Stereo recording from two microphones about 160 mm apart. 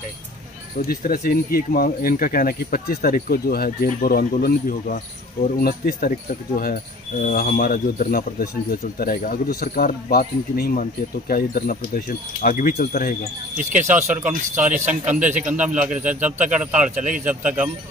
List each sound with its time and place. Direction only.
0.8 s speech: 65° left (ahead or behind)
13.6 s speech: 50° right (ahead or behind)
14.1 s speech: 10° right (ahead or behind)
16.9 s speech: 50° right (ahead or behind)
17.2 s speech: 10° right (ahead or behind)